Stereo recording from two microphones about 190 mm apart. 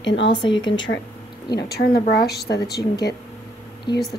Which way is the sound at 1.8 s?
55° left (ahead or behind).